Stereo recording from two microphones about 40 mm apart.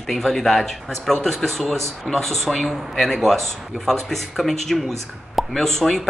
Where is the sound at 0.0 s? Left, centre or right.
Centre.